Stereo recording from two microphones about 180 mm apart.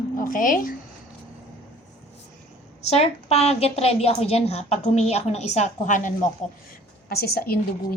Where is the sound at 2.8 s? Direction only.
35° left (ahead or behind).